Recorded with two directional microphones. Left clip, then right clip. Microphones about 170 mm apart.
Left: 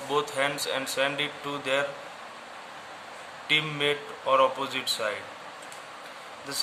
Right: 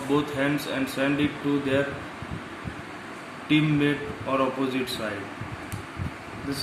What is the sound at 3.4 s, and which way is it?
Speech, 40° left (ahead or behind).